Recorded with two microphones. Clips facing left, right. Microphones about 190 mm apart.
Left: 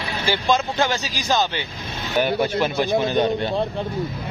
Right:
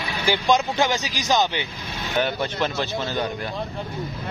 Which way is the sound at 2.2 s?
10° left (ahead or behind).